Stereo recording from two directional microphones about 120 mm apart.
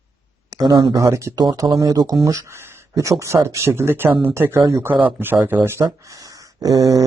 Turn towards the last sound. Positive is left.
turn(degrees=-30)  # may be behind; listen again after turning